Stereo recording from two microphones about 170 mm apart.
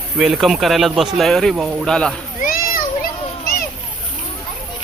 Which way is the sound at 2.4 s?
55° left (ahead or behind).